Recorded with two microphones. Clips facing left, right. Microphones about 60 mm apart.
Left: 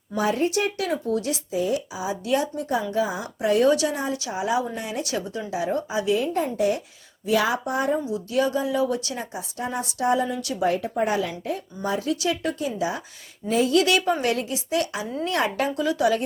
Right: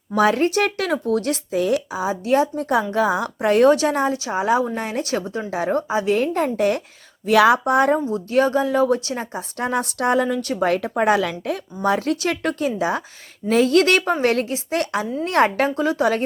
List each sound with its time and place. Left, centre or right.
0.2 s speech: right
1.9 s a woman's voice: right
2.9 s a woman's voice: right
4.1 s speech: right
4.4 s a woman's voice: right
9.6 s a woman's voice: right
12.2 s a woman's voice: right
15.7 s speech: right